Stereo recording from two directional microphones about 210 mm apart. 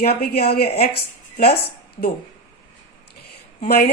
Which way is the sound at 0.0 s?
50° left (ahead or behind).